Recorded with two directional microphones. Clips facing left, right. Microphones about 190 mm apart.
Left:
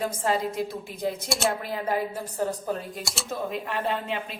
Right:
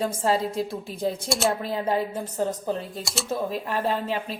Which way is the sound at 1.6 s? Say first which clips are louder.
Right 2 dB; 25° right (ahead or behind).